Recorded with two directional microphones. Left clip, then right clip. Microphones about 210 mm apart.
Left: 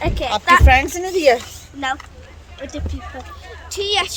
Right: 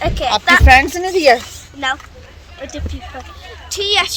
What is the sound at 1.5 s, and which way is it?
A woman's voice, 5° right (ahead or behind).